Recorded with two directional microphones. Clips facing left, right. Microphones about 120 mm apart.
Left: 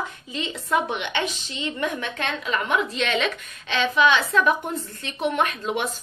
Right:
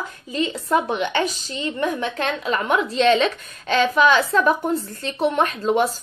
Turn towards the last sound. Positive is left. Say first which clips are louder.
# right 5 dB
turn(degrees=-35)  # may be behind; listen again after turning